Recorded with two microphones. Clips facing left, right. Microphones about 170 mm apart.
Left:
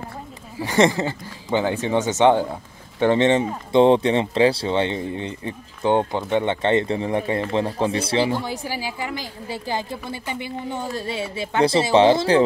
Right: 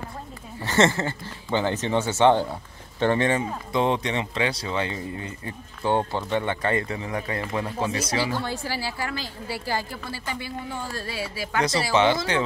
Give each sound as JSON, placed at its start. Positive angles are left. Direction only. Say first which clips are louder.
{"t": 0.6, "sound": "speech", "louder": "left 3 dB", "side_deg": 15}